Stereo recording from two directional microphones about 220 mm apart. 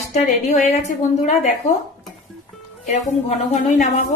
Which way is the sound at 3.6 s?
35° left (ahead or behind).